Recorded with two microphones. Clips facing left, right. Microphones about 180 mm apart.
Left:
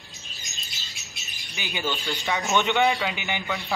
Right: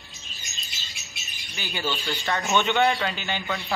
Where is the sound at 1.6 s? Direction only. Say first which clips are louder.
Even; 15° left (ahead or behind).